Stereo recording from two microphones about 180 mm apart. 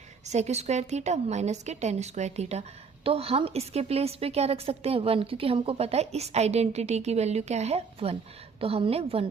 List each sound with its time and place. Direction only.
0.3 s a woman's voice: 40° right (ahead or behind)